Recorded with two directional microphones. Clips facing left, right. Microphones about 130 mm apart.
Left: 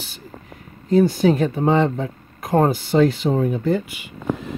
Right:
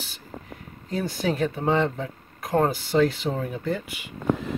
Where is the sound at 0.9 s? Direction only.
25° left (ahead or behind).